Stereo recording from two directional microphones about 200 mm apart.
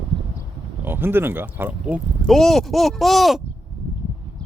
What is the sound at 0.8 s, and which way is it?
Speech, 10° right (ahead or behind).